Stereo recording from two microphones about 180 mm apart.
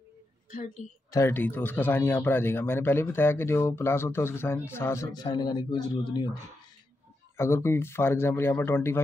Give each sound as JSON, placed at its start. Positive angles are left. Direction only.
{"t": 0.5, "sound": "speech", "side_deg": 50}
{"t": 1.1, "sound": "speech", "side_deg": 10}
{"t": 7.3, "sound": "speech", "side_deg": 15}